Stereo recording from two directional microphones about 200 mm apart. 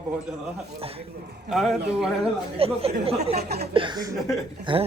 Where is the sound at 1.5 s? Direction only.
Centre (ahead or behind).